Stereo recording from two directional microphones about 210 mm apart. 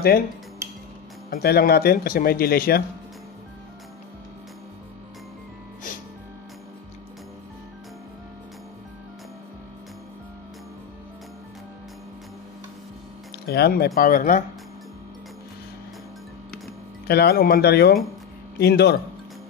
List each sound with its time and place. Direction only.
1.3 s speech: 45° left (ahead or behind)
13.5 s speech: 50° left (ahead or behind)
17.1 s speech: 50° left (ahead or behind)